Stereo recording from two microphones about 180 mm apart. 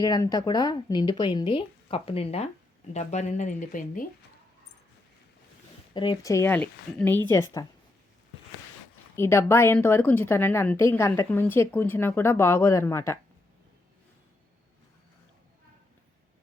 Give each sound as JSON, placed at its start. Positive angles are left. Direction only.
{"t": 0.0, "sound": "speech", "side_deg": 20}
{"t": 5.9, "sound": "a woman's voice", "side_deg": 25}
{"t": 9.1, "sound": "a woman's voice", "side_deg": 15}